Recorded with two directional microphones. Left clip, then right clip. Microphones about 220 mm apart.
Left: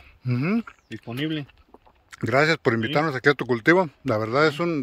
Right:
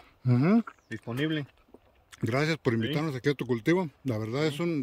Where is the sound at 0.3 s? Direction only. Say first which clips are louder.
Even; 20° right (ahead or behind).